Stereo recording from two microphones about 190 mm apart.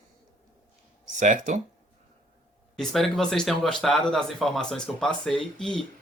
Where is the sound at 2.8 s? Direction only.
Centre (ahead or behind).